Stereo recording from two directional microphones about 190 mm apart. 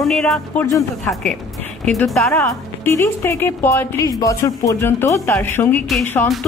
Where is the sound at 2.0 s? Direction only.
5° left (ahead or behind).